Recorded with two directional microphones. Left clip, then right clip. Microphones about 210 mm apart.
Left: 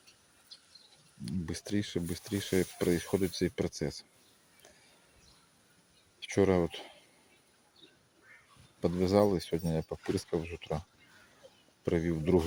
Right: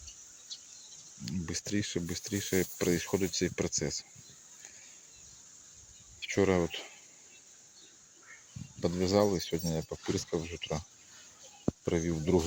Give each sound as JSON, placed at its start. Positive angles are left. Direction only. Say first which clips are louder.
{"t": 0.5, "sound": "insect", "louder": "right 7 dB", "side_deg": -35}
{"t": 1.2, "sound": "speech", "louder": "right 2 dB", "side_deg": 10}
{"t": 6.1, "sound": "speech", "louder": "even", "side_deg": 10}
{"t": 8.8, "sound": "speech", "louder": "left 1 dB", "side_deg": 15}
{"t": 11.9, "sound": "speech", "louder": "left 1 dB", "side_deg": 5}